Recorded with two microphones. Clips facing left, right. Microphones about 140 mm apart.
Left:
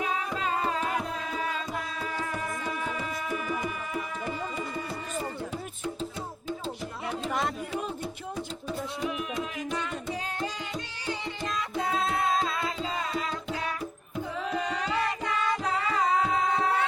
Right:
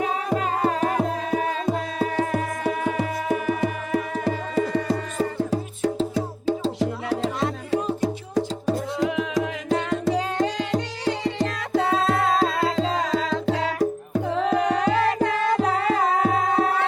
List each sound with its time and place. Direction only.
0.3 s music: 55° right (ahead or behind)